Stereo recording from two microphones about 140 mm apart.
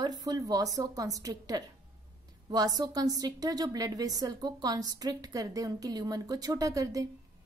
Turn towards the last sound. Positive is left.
turn(degrees=-25)  # may be behind; listen again after turning